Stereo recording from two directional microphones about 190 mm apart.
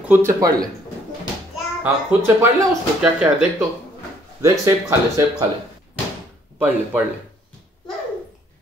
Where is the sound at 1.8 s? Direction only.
15° right (ahead or behind).